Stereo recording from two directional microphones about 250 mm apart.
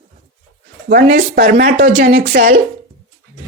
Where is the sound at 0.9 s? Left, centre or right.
Right.